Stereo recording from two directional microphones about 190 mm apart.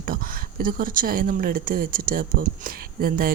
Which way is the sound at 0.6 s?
50° right (ahead or behind).